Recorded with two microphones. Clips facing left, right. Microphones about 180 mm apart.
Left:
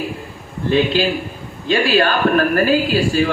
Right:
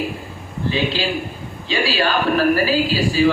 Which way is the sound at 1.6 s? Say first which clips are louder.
Left 5 dB; 55° left (ahead or behind).